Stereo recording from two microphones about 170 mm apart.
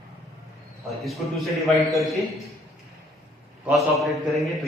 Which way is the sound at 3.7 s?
Centre (ahead or behind).